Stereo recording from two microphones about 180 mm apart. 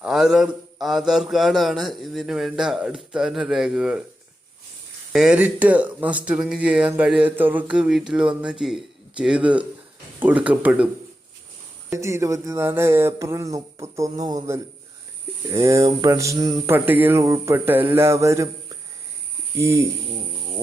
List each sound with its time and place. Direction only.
0.0 s a man's voice: centre (ahead or behind)
5.1 s speech: 5° right (ahead or behind)
11.9 s speech: 15° right (ahead or behind)
15.5 s speech: 15° right (ahead or behind)